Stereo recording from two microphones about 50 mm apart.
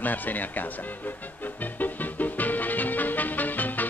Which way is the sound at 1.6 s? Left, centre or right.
Left.